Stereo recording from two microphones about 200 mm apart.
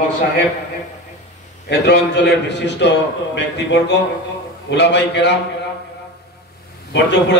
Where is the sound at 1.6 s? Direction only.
60° left (ahead or behind).